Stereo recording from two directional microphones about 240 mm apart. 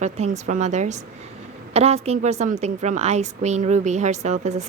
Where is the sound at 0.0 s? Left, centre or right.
Right.